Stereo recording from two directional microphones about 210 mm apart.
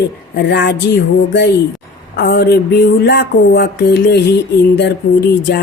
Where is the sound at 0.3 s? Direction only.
50° left (ahead or behind).